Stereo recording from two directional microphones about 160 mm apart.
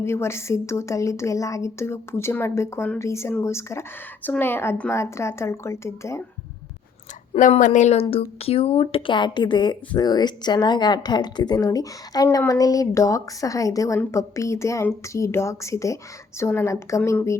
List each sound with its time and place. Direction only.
0.0 s a woman's voice: 15° left (ahead or behind)
7.3 s a woman's voice: 55° left (ahead or behind); by 17.3 s 15° left (ahead or behind)